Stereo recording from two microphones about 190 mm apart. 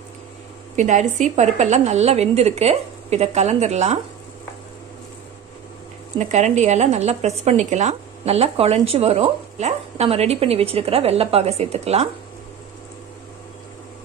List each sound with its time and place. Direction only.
0.7 s speech: 40° right (ahead or behind)
6.1 s speech: 40° right (ahead or behind)